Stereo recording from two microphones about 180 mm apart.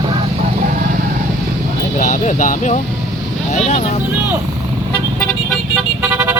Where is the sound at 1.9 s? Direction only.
45° left (ahead or behind).